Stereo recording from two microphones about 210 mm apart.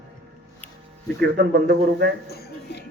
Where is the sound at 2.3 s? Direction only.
50° left (ahead or behind).